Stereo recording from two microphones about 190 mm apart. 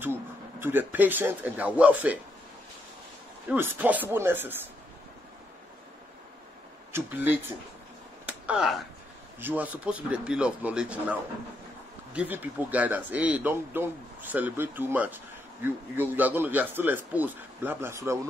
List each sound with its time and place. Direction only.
0.0 s speech: 10° right (ahead or behind)
3.4 s speech: 10° right (ahead or behind)
6.9 s speech: 10° right (ahead or behind)
8.3 s a sound: 5° right (ahead or behind)
9.4 s speech: 10° right (ahead or behind)